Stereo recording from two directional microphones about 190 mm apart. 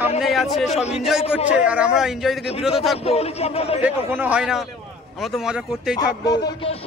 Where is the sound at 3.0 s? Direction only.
30° left (ahead or behind).